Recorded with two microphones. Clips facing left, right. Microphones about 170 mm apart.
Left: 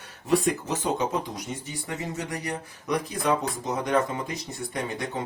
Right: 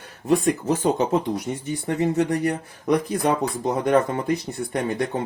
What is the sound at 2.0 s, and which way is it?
Speech, 60° right (ahead or behind).